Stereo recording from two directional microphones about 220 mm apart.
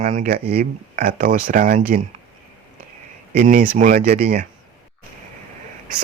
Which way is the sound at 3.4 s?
35° right (ahead or behind).